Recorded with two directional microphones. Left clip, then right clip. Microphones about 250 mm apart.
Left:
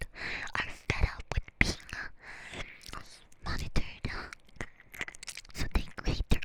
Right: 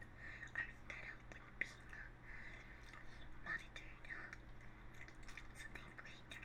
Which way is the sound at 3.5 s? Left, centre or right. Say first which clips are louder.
Left 9 dB; left.